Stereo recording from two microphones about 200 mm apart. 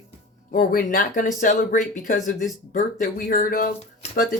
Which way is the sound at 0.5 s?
45° left (ahead or behind).